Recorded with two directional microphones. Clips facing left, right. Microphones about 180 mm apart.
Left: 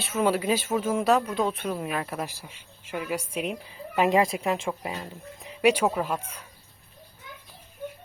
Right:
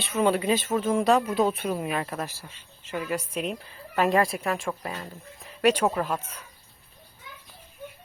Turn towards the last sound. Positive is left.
turn(degrees=10)  # may be behind; listen again after turning